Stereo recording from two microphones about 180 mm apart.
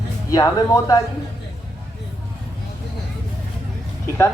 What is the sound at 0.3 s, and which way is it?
Speech, 20° left (ahead or behind).